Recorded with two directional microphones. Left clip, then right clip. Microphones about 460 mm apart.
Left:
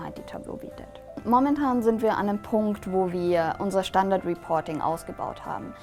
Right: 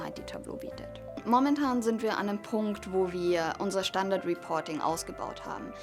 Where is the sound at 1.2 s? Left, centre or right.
Left.